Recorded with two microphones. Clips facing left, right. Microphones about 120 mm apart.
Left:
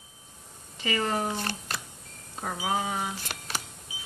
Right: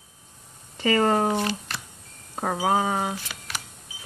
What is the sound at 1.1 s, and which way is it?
Speech, 70° right (ahead or behind).